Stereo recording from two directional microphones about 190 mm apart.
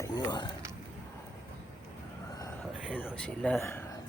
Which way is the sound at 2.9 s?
5° left (ahead or behind).